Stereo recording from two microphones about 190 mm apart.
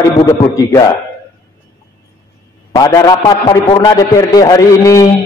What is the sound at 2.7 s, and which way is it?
A man's voice, 20° left (ahead or behind).